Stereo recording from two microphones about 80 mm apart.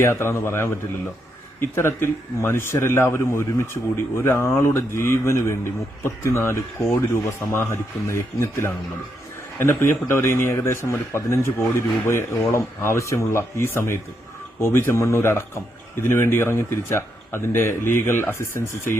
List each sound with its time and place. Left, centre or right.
0.0 s a man's voice: left